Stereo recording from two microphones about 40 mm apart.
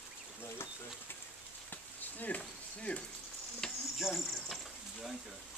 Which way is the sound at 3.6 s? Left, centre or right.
Centre.